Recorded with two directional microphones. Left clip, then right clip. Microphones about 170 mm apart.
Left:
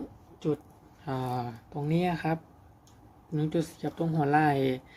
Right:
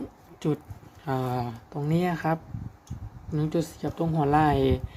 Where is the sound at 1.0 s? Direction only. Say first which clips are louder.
Right 4 dB; 10° right (ahead or behind).